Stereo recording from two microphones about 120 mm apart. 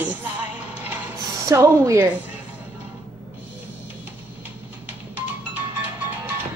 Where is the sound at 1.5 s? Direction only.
25° right (ahead or behind).